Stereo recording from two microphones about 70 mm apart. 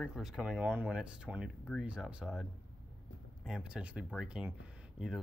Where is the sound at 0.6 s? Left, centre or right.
Right.